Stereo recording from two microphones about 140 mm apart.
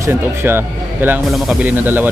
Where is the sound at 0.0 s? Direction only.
15° right (ahead or behind).